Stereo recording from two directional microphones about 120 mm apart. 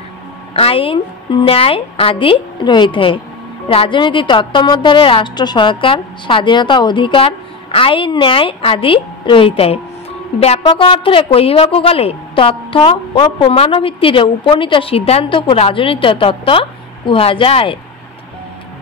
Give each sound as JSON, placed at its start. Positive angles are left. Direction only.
{"t": 0.6, "sound": "a woman's voice", "side_deg": 50}